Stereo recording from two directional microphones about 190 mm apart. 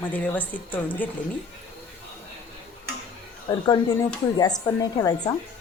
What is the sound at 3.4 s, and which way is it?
Speech, 20° left (ahead or behind).